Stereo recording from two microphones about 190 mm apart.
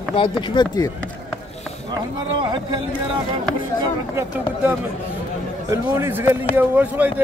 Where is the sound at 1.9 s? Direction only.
25° right (ahead or behind).